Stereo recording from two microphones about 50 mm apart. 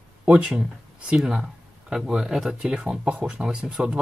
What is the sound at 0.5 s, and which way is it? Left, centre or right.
Speech, centre.